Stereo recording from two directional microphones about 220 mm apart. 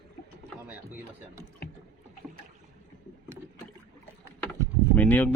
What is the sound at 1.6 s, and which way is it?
Rowboat, 45° left (ahead or behind).